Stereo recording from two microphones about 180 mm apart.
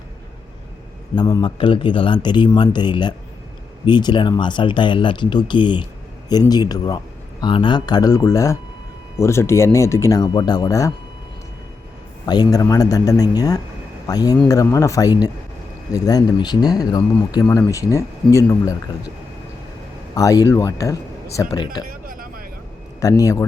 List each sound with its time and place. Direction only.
1.1 s a man's voice: 25° left (ahead or behind)
12.2 s a man's voice: 20° left (ahead or behind)
20.1 s a man's voice: 20° left (ahead or behind)
21.8 s a sound: 50° right (ahead or behind)
23.0 s a man's voice: 20° left (ahead or behind)